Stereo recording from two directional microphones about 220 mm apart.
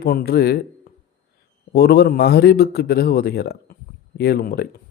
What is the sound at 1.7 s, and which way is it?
A man's voice, 45° left (ahead or behind).